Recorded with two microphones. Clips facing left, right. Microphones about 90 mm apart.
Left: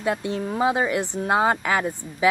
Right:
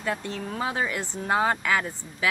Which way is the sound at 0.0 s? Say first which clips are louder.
Left 5 dB; 15° left (ahead or behind).